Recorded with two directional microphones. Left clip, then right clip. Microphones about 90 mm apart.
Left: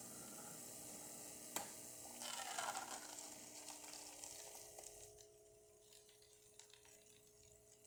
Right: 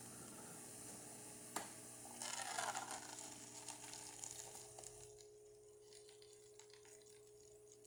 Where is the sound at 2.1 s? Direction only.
15° right (ahead or behind).